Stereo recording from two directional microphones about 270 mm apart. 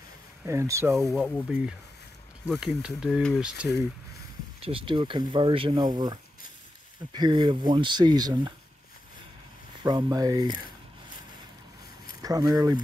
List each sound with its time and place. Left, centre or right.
0.5 s speech: centre
1.1 s speech: centre
4.6 s speech: centre
7.2 s speech: centre
9.8 s speech: centre
12.2 s speech: centre